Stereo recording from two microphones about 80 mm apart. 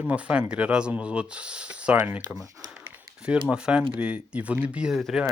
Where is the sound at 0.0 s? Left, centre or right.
Centre.